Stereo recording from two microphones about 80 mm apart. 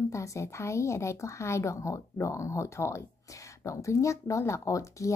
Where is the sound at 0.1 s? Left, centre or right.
Left.